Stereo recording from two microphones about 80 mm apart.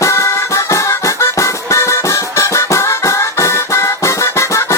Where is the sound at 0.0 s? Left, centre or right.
Left.